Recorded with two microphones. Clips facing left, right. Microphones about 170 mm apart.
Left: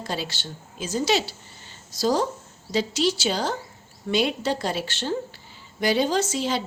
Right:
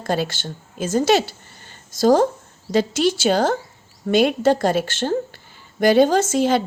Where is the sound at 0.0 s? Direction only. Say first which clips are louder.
Right 8 dB; 50° right (ahead or behind).